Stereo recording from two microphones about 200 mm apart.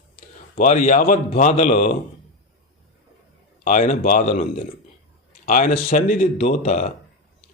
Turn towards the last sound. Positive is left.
turn(degrees=35)  # may be behind; listen again after turning